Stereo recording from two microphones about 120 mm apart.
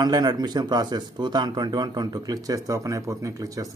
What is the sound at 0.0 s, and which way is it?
Speech, 35° right (ahead or behind).